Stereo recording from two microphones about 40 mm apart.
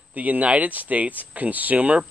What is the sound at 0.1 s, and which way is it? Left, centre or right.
Speech, right.